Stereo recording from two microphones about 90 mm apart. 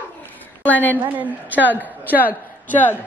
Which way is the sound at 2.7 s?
20° left (ahead or behind).